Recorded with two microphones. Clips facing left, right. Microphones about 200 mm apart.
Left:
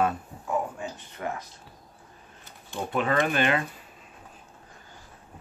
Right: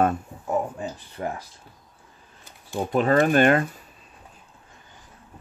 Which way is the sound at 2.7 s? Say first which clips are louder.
Right 6 dB; 40° right (ahead or behind).